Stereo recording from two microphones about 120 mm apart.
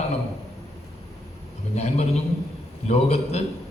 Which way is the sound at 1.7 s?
65° left (ahead or behind).